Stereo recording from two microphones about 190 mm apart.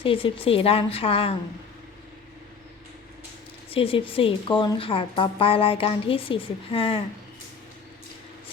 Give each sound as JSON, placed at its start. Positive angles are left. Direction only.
{"t": 0.0, "sound": "speech", "side_deg": 30}
{"t": 3.7, "sound": "speech", "side_deg": 30}